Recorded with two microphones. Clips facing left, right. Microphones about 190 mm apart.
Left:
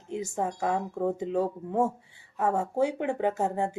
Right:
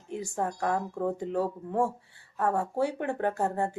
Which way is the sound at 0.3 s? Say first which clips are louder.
Even; 10° left (ahead or behind).